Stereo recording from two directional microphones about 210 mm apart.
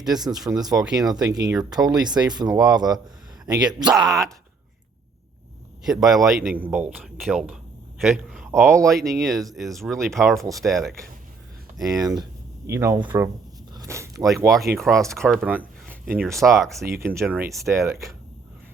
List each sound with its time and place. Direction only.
0.6 s speech: 15° right (ahead or behind)
3.8 s speech: centre (ahead or behind)
5.8 s speech: centre (ahead or behind)
11.8 s speech: 15° right (ahead or behind)
13.7 s a sound: 15° right (ahead or behind)
14.4 s speech: 15° right (ahead or behind)
14.8 s speech: centre (ahead or behind)
16.9 s speech: 10° right (ahead or behind)